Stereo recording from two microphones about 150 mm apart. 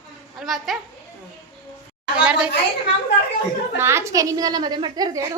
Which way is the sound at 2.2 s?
5° right (ahead or behind).